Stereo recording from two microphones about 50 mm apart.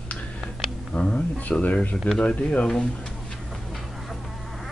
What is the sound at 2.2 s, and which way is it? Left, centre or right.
Speech, left.